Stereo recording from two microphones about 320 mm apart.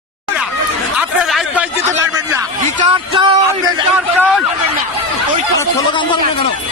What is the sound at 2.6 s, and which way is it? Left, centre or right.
Speech, right.